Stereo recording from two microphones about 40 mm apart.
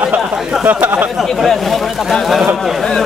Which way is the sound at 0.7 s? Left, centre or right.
Right.